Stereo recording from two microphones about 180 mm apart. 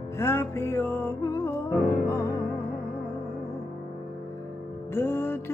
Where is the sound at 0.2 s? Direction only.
15° left (ahead or behind).